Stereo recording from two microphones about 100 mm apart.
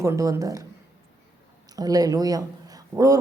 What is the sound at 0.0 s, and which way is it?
Speech, 30° right (ahead or behind).